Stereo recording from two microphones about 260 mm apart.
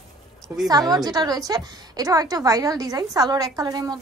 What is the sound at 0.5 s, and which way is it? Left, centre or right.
A woman's voice, centre.